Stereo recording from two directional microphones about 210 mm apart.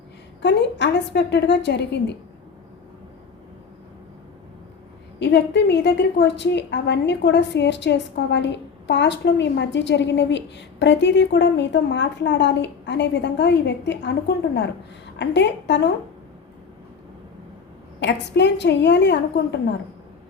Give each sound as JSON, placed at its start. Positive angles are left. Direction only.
{"t": 0.4, "sound": "a woman's voice", "side_deg": 55}
{"t": 5.2, "sound": "a woman's voice", "side_deg": 55}
{"t": 18.0, "sound": "a woman's voice", "side_deg": 55}